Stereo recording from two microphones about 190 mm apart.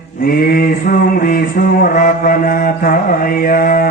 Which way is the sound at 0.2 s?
50° left (ahead or behind).